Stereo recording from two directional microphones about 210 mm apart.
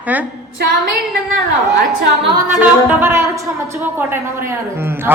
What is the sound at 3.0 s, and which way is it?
A man's voice, 10° right (ahead or behind).